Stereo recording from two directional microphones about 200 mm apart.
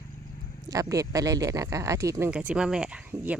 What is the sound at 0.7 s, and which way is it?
Speech, 15° right (ahead or behind).